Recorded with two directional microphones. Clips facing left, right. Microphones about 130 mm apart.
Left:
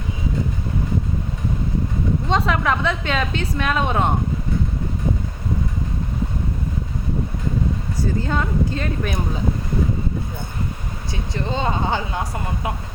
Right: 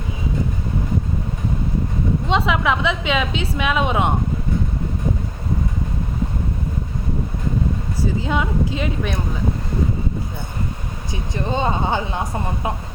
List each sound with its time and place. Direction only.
2.3 s a woman's voice: 5° right (ahead or behind)
8.3 s a woman's voice: 10° right (ahead or behind)
11.1 s speech: 15° right (ahead or behind)